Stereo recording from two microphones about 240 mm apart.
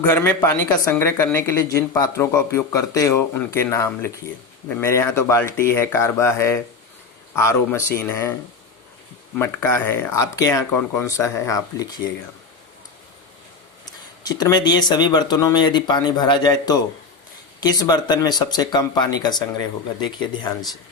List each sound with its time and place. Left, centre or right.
0.0 s speech: centre
9.4 s speech: centre
13.8 s speech: centre